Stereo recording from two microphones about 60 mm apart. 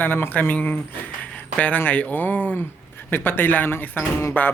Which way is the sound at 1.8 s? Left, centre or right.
Left.